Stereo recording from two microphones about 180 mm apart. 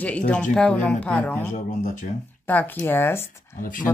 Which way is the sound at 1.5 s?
45° left (ahead or behind).